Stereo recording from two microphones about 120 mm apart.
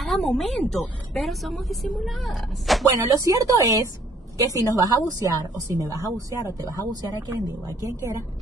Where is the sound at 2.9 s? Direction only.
30° right (ahead or behind).